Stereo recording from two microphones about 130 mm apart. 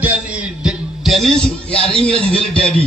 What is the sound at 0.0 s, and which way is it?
Music, 10° right (ahead or behind).